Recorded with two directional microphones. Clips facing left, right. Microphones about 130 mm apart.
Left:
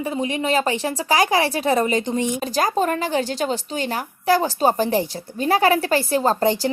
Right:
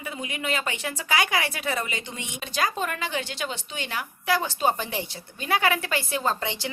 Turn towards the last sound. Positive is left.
turn(degrees=40)  # may be behind; listen again after turning